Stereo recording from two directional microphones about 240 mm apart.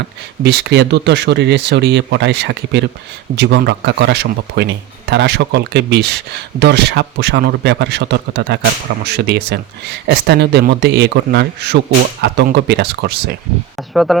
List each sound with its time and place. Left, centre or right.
0.4 s a man's voice: right
13.7 s speech: centre